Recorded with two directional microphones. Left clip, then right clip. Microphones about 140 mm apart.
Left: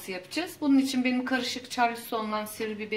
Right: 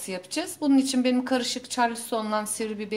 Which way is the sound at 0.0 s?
90° right.